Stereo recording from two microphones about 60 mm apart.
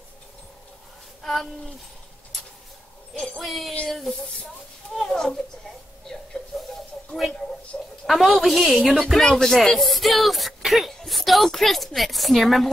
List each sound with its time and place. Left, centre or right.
1.2 s speech: centre
3.3 s a woman's voice: centre
4.9 s a child's voice: centre
6.0 s a sound: centre
7.7 s a sound: centre
8.1 s a woman's voice: centre